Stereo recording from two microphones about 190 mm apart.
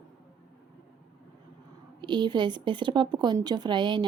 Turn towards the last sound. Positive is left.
turn(degrees=-25)  # may be behind; listen again after turning